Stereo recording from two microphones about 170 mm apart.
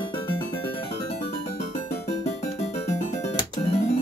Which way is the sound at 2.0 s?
40° left (ahead or behind).